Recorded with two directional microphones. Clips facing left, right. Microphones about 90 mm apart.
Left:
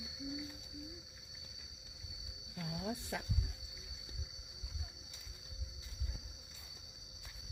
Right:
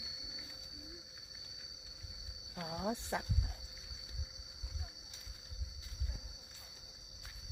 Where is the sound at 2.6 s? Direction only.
35° right (ahead or behind).